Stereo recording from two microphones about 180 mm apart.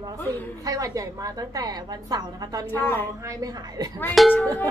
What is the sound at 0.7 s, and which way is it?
A woman's voice, 20° right (ahead or behind).